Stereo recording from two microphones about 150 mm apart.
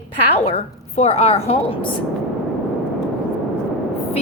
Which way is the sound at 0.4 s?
45° left (ahead or behind).